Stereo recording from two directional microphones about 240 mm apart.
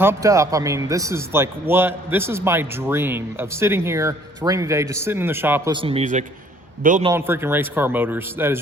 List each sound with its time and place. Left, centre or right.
0.0 s speech: centre
5.7 s a man's voice: right
7.1 s speech: centre